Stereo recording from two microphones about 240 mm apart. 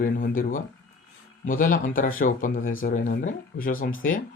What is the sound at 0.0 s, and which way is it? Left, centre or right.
Speech, left.